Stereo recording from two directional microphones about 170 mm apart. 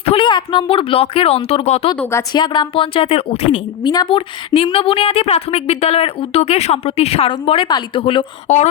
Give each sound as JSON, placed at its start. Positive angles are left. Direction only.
{"t": 0.0, "sound": "a woman's voice", "side_deg": 30}
{"t": 2.0, "sound": "a woman's voice", "side_deg": 15}
{"t": 2.3, "sound": "a woman's voice", "side_deg": 25}